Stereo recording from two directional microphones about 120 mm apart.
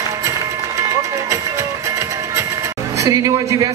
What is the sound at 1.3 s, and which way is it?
Music, 25° right (ahead or behind).